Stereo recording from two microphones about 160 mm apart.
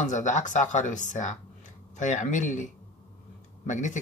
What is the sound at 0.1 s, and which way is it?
Speech, 50° left (ahead or behind).